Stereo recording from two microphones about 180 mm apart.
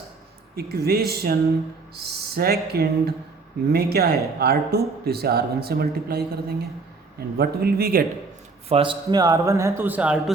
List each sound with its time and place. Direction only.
0.5 s speech: 60° right (ahead or behind)
8.7 s a man's voice: 30° right (ahead or behind); by 10.3 s 5° right (ahead or behind)